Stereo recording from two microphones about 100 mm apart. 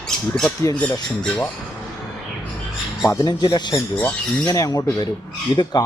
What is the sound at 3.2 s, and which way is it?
Speech, 45° left (ahead or behind).